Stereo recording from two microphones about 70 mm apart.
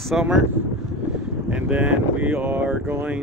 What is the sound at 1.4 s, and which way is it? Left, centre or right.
Speech, centre.